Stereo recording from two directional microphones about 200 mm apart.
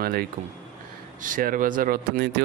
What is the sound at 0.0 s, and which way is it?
Speech, 50° right (ahead or behind).